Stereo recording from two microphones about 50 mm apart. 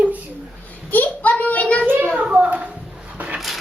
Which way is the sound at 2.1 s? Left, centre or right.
Right.